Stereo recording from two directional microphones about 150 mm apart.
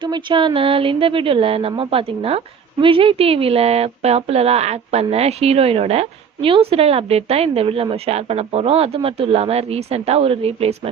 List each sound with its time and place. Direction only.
0.0 s a woman's voice: 30° right (ahead or behind)